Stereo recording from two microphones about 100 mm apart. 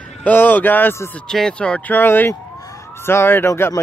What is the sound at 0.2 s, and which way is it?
Speech, 20° left (ahead or behind).